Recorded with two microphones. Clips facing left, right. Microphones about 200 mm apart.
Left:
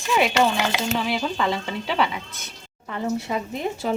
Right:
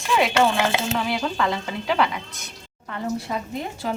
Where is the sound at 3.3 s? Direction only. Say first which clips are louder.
Left 2 dB; 5° left (ahead or behind).